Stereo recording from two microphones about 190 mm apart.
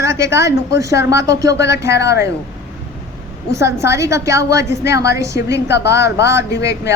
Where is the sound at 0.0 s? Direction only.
15° right (ahead or behind).